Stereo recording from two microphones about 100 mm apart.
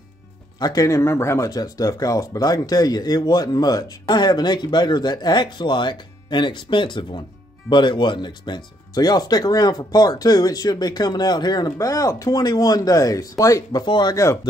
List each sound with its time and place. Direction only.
0.6 s speech: 40° left (ahead or behind)
1.5 s speech: 40° left (ahead or behind)
14.1 s speech: 30° left (ahead or behind)